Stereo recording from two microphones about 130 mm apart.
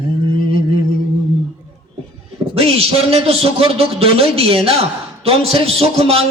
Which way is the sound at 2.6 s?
50° right (ahead or behind).